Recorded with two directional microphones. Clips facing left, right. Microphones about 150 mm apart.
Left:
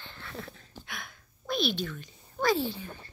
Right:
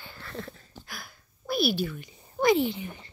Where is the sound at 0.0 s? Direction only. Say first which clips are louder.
Right 3 dB; 5° right (ahead or behind).